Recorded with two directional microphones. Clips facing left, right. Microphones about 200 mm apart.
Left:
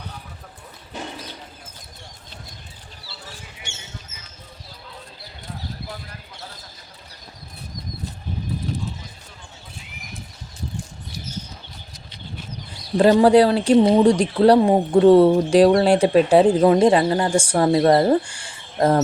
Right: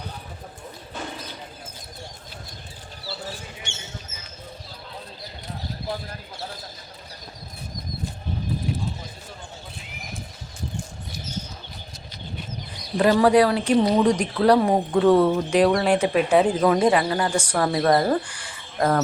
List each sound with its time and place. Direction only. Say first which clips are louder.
13.0 s speech: left 4 dB; 30° left (ahead or behind)